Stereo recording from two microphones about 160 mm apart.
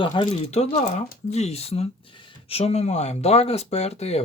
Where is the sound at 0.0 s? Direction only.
30° left (ahead or behind).